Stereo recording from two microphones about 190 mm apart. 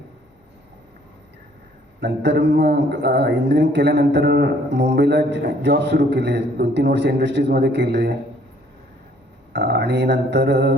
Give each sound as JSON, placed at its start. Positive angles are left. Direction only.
{"t": 2.0, "sound": "a man's voice", "side_deg": -65}
{"t": 9.5, "sound": "a man's voice", "side_deg": -65}